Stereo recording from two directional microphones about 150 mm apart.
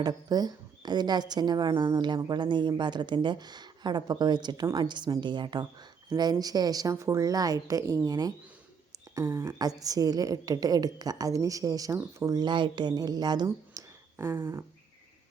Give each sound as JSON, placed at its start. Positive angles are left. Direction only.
{"t": 0.0, "sound": "speech", "side_deg": -25}